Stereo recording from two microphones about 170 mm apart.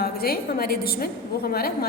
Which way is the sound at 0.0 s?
60° left (ahead or behind).